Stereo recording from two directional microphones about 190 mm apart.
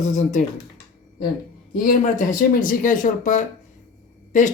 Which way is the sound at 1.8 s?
45° left (ahead or behind).